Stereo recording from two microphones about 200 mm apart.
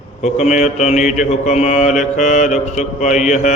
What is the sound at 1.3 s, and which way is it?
Mantra, 35° left (ahead or behind).